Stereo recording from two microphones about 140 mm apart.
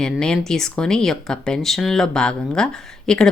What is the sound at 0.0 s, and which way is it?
Speech, 5° left (ahead or behind).